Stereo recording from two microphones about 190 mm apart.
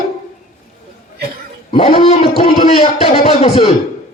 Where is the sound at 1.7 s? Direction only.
30° left (ahead or behind).